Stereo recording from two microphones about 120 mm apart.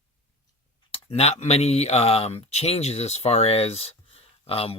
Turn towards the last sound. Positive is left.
turn(degrees=55)  # may be behind; listen again after turning